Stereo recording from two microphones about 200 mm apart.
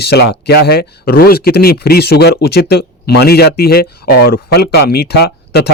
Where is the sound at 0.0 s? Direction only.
55° left (ahead or behind).